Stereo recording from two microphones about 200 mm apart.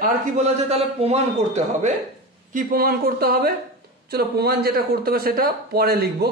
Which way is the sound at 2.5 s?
45° right (ahead or behind).